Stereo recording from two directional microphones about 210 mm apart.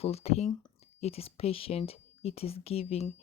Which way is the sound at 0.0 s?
30° left (ahead or behind).